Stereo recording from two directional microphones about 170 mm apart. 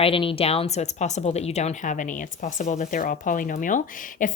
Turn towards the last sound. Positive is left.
turn(degrees=50)  # may be behind; listen again after turning